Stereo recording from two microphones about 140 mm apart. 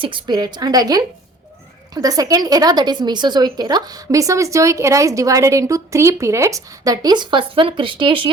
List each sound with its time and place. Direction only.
0.0 s a woman's voice: 35° right (ahead or behind)